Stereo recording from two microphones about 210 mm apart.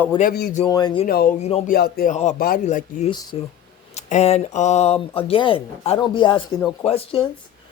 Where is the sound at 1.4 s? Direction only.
30° left (ahead or behind).